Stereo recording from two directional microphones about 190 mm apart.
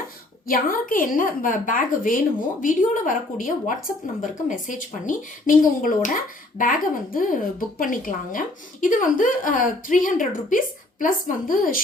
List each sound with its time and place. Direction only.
0.4 s speech: 50° left (ahead or behind)